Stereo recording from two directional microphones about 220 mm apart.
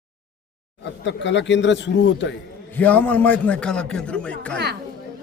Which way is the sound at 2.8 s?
5° left (ahead or behind).